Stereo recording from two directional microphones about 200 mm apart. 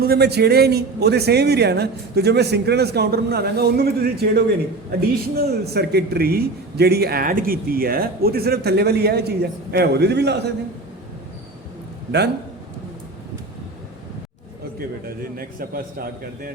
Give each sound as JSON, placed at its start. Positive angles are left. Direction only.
{"t": 0.0, "sound": "a man's voice", "side_deg": -55}
{"t": 14.8, "sound": "a man's voice", "side_deg": -45}